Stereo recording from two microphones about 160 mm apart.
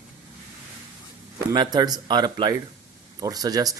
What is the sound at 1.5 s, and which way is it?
Speech, 25° right (ahead or behind).